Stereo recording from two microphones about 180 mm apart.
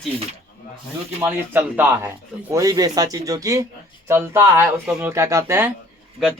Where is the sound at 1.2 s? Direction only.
10° right (ahead or behind).